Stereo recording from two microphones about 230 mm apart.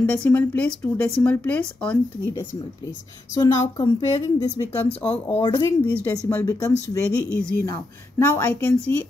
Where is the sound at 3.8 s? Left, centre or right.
Left.